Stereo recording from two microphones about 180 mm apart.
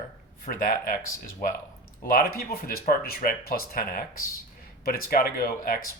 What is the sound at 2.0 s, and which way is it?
Speech, 55° left (ahead or behind).